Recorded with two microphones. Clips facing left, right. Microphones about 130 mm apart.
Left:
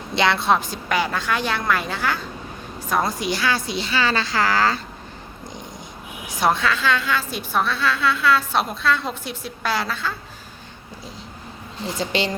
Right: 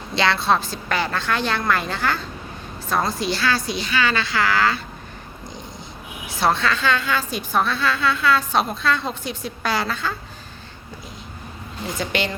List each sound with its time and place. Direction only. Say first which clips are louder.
0.2 s a woman's voice: left 1 dB; 20° left (ahead or behind)
2.9 s a woman's voice: even; 15° left (ahead or behind); by 4.8 s 40° left (ahead or behind)
6.2 s a woman's voice: even; 15° left (ahead or behind)
11.9 s a woman's voice: left 1 dB; 30° left (ahead or behind)